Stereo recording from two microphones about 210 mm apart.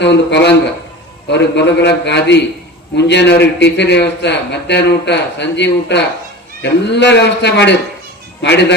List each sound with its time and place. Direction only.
0.0 s a man's voice: 55° left (ahead or behind)